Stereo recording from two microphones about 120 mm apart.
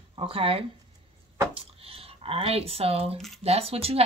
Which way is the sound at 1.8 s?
55° right (ahead or behind).